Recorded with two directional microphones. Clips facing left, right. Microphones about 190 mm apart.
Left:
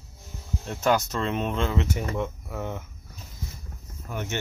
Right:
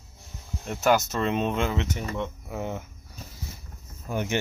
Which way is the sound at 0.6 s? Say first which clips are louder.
Right 1 dB; 5° right (ahead or behind).